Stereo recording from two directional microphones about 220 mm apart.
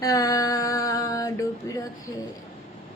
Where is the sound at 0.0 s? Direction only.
15° left (ahead or behind).